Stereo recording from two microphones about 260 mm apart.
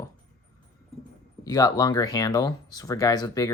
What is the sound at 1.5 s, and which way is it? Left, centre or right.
Speech, centre.